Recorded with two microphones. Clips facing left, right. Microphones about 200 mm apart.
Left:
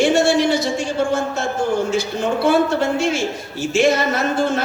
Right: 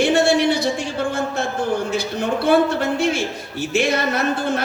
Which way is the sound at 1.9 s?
55° right (ahead or behind).